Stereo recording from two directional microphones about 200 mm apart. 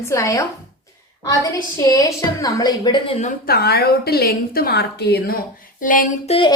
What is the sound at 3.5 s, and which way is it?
A woman's voice, 50° left (ahead or behind).